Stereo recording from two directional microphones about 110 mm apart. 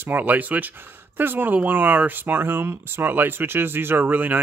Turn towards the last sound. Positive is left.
turn(degrees=-15)  # may be behind; listen again after turning